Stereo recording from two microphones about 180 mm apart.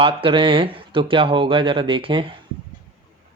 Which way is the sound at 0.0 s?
30° right (ahead or behind).